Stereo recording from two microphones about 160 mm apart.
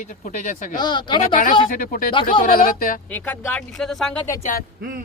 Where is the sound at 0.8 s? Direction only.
25° left (ahead or behind).